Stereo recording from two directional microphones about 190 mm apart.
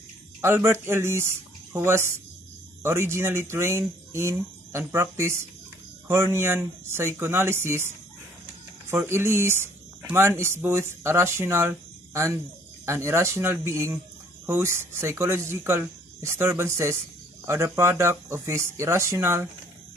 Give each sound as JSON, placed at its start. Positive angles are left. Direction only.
{"t": 0.4, "sound": "speech", "side_deg": -15}
{"t": 8.9, "sound": "speech", "side_deg": -15}